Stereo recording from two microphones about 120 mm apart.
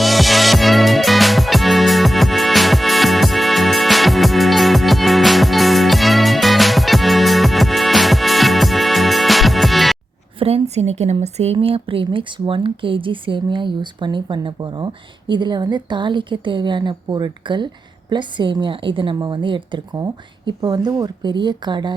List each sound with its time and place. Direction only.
0.0 s music: centre (ahead or behind)
10.4 s a woman's voice: 60° right (ahead or behind); by 21.9 s 40° right (ahead or behind)